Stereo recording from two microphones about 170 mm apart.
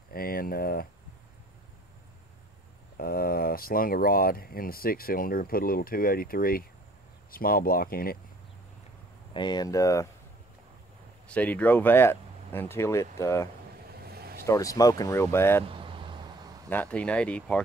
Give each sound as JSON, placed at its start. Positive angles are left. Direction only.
{"t": 0.1, "sound": "speech", "side_deg": 60}
{"t": 3.0, "sound": "speech", "side_deg": 60}
{"t": 9.3, "sound": "speech", "side_deg": 25}
{"t": 11.2, "sound": "speech", "side_deg": 10}
{"t": 13.9, "sound": "vehicle", "side_deg": -65}
{"t": 14.4, "sound": "speech", "side_deg": 20}
{"t": 15.6, "sound": "a sound", "side_deg": -30}
{"t": 16.6, "sound": "speech", "side_deg": 10}